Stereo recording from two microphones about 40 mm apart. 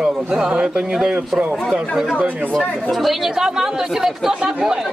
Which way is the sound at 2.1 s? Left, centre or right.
Right.